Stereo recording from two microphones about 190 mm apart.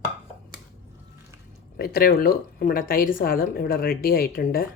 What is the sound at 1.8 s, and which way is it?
A woman's voice, 50° left (ahead or behind).